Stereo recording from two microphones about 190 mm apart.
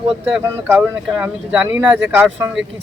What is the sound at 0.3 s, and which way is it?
Speech, 5° right (ahead or behind).